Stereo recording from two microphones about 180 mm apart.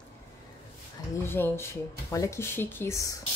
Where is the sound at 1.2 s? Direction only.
10° left (ahead or behind).